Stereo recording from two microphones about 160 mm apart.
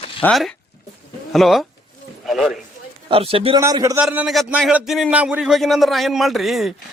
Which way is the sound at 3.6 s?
20° right (ahead or behind).